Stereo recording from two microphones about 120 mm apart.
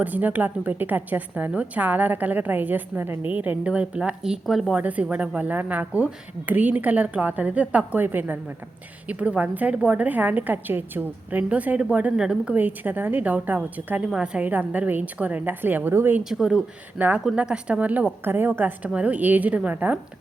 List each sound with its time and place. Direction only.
0.0 s a woman's voice: 15° right (ahead or behind)
4.7 s a woman's voice: 10° right (ahead or behind)
16.3 s a woman's voice: 5° right (ahead or behind)